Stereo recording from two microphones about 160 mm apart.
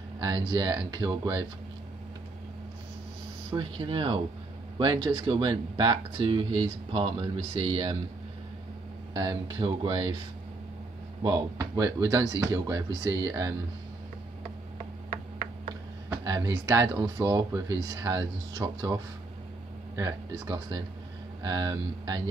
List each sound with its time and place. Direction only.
0.2 s speech: 25° right (ahead or behind)
3.5 s speech: 30° right (ahead or behind)
9.1 s speech: 25° right (ahead or behind)
11.2 s speech: 25° right (ahead or behind)
16.1 s speech: 20° right (ahead or behind)
20.0 s speech: 20° right (ahead or behind)